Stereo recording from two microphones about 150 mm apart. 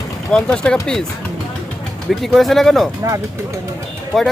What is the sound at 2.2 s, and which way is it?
Speech, centre (ahead or behind).